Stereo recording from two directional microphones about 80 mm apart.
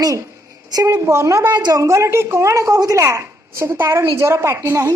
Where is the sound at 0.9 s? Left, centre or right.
Right.